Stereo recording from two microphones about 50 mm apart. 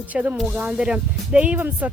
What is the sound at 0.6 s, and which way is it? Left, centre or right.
Speech, centre.